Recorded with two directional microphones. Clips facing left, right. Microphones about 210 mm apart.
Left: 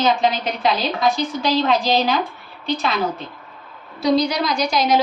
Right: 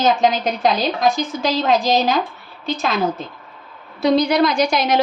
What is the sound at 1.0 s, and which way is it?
A woman's voice, 45° right (ahead or behind).